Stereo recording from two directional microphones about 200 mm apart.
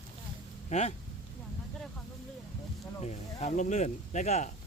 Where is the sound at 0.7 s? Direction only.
35° left (ahead or behind).